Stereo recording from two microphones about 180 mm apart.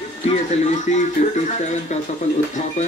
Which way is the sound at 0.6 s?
40° left (ahead or behind).